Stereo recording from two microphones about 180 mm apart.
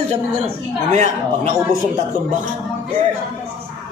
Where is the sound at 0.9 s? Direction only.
40° right (ahead or behind).